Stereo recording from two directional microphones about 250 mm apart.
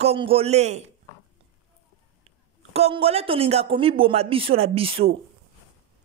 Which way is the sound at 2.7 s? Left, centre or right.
Right.